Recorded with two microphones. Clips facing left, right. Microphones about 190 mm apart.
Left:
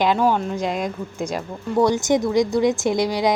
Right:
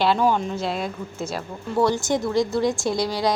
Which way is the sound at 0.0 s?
10° left (ahead or behind).